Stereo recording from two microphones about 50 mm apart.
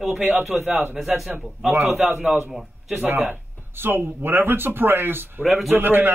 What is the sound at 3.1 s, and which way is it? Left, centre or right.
Speech, right.